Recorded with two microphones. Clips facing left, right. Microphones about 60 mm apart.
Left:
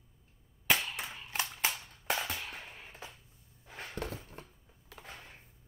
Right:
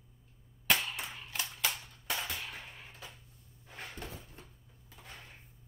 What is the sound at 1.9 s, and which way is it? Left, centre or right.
Music, left.